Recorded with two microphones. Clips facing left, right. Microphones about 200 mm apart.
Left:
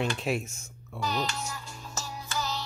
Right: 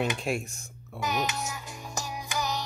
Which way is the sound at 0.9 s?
20° right (ahead or behind).